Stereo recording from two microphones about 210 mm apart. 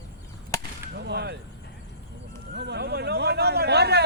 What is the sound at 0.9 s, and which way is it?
Whip, 50° right (ahead or behind).